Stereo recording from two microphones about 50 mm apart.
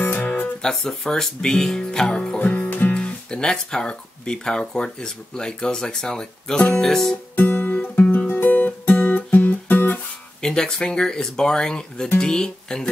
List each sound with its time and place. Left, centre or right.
0.1 s music: left
0.6 s speech: centre
2.3 s music: left
2.9 s speech: centre
7.3 s guitar: left
8.3 s music: left
10.4 s speech: centre